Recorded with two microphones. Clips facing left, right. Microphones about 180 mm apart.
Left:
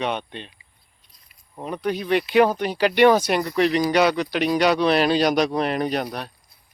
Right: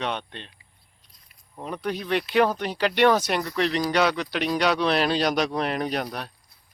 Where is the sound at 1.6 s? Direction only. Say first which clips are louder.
Left 4 dB; centre (ahead or behind).